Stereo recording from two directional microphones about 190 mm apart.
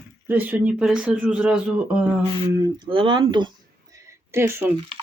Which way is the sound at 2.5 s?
20° right (ahead or behind).